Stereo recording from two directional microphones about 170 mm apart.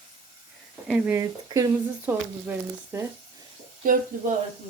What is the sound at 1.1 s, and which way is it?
Speech, 20° right (ahead or behind).